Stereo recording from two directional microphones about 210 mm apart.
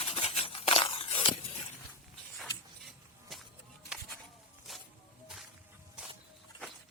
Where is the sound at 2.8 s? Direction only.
Centre (ahead or behind).